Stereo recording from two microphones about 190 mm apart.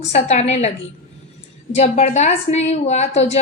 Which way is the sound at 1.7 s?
35° left (ahead or behind).